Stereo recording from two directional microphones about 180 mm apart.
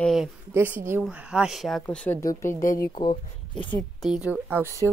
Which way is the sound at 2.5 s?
45° left (ahead or behind).